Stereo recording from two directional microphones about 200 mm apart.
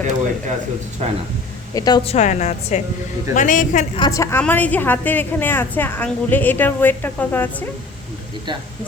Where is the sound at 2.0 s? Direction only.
35° left (ahead or behind).